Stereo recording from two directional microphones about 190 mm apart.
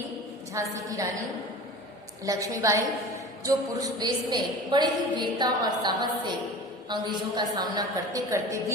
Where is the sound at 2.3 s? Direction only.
20° right (ahead or behind).